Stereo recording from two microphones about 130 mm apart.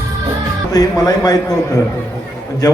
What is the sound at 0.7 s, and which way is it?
Music, 30° left (ahead or behind).